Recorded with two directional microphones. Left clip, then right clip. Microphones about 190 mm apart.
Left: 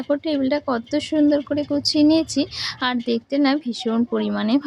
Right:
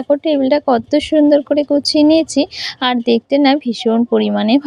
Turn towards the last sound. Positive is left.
turn(degrees=-30)  # may be behind; listen again after turning